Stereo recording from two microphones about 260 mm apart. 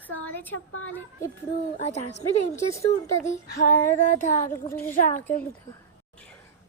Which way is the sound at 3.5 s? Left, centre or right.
Left.